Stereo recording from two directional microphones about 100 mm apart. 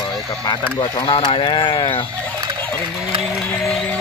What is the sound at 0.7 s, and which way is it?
Speech, 50° left (ahead or behind).